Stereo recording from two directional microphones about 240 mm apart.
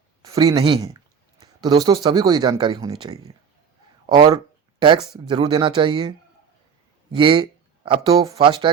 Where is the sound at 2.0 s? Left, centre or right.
Centre.